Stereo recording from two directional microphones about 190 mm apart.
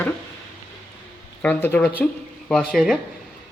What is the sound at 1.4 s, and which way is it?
A woman's voice, 10° left (ahead or behind).